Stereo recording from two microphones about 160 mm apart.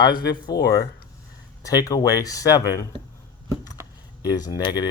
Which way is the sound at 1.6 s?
20° left (ahead or behind).